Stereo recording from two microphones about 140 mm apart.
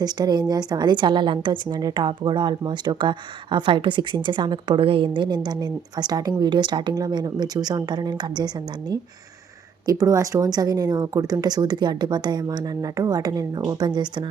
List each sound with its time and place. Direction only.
0.0 s a woman's voice: 30° right (ahead or behind)
9.8 s speech: 25° right (ahead or behind)